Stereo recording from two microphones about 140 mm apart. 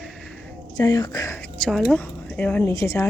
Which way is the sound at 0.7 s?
30° left (ahead or behind).